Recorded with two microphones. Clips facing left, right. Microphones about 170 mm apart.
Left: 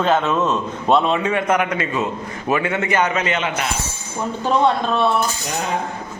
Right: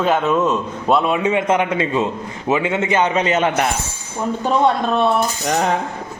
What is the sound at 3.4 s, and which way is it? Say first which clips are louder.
Speech: right 6 dB; 50° right (ahead or behind).